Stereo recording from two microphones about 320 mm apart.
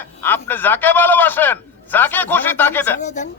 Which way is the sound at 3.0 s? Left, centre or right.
Left.